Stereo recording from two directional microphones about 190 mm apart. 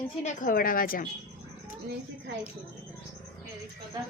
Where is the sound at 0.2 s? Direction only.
40° left (ahead or behind).